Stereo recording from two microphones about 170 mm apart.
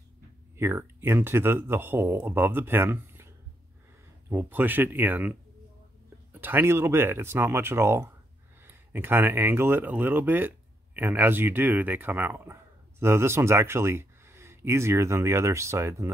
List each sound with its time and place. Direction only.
0.6 s speech: 15° right (ahead or behind)